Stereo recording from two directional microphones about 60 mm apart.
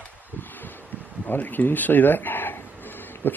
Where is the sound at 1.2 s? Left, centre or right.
Left.